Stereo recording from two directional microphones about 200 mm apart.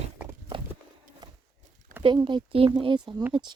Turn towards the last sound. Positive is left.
turn(degrees=-20)  # may be behind; listen again after turning